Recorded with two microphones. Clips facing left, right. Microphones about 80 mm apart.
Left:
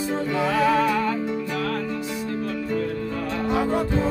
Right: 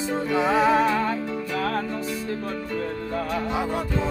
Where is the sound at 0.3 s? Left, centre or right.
Right.